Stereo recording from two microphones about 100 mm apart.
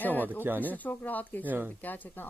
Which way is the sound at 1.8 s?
20° left (ahead or behind).